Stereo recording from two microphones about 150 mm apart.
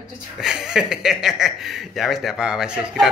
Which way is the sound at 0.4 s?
5° right (ahead or behind).